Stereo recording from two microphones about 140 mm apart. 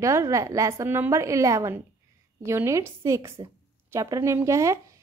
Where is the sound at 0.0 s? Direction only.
20° right (ahead or behind).